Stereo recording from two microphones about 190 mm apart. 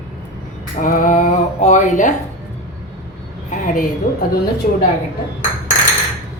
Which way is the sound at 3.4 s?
40° left (ahead or behind).